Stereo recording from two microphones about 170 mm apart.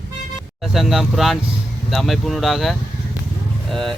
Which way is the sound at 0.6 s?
Centre (ahead or behind).